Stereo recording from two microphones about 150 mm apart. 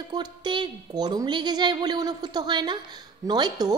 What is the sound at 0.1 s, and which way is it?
A woman's voice, 30° right (ahead or behind).